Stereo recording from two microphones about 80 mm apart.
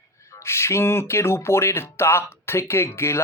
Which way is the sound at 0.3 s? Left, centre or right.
Left.